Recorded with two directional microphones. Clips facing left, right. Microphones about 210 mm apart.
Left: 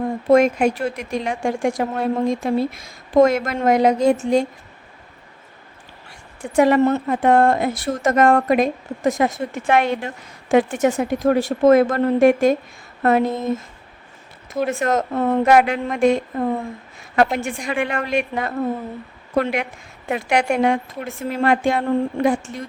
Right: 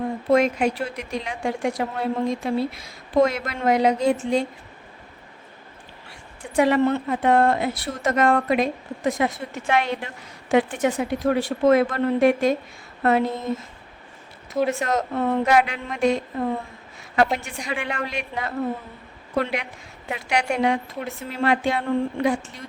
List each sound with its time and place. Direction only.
0.3 s speech: 50° left (ahead or behind)
6.4 s speech: 45° left (ahead or behind)
14.7 s speech: 50° left (ahead or behind)
17.3 s speech: 50° left (ahead or behind)